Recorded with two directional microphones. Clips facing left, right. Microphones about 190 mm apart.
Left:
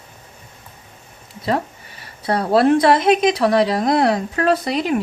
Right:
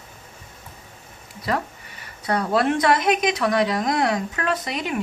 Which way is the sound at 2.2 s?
30° left (ahead or behind).